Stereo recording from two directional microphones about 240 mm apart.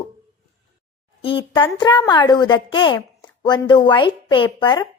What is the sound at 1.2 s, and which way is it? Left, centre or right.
A woman's voice, left.